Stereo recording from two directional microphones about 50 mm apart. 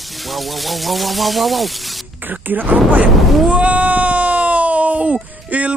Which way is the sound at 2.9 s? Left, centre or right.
Right.